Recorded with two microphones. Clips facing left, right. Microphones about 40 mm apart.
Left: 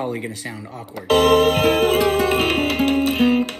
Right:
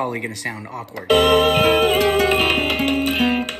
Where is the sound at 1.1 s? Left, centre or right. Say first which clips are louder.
Even; right.